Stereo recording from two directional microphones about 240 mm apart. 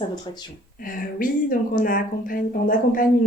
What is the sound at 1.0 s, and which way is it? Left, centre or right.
Speech, left.